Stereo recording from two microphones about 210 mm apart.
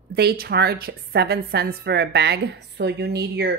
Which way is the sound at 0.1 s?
50° right (ahead or behind).